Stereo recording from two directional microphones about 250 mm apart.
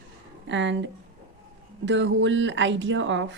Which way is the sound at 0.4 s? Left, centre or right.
Right.